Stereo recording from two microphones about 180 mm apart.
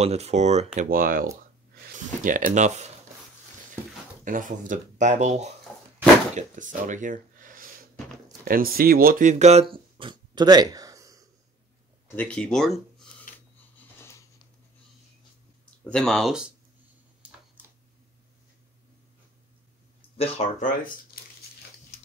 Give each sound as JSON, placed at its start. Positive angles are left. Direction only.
{"t": 0.0, "sound": "speech", "side_deg": -35}
{"t": 0.7, "sound": "speech", "side_deg": -50}
{"t": 2.2, "sound": "speech", "side_deg": -45}
{"t": 4.2, "sound": "speech", "side_deg": -45}
{"t": 5.7, "sound": "door", "side_deg": 5}
{"t": 6.3, "sound": "speech", "side_deg": -45}
{"t": 12.2, "sound": "speech", "side_deg": 5}
{"t": 13.7, "sound": "a sound", "side_deg": 15}
{"t": 15.8, "sound": "speech", "side_deg": 5}
{"t": 20.2, "sound": "speech", "side_deg": 35}
{"t": 21.2, "sound": "crumpling", "side_deg": 55}